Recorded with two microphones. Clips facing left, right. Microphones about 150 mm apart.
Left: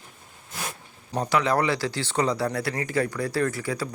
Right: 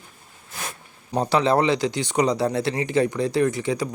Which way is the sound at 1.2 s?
30° right (ahead or behind).